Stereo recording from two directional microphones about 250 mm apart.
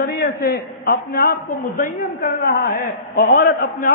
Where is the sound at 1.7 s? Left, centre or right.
Left.